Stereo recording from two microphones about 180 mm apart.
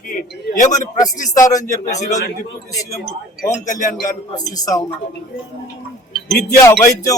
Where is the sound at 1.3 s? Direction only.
20° left (ahead or behind).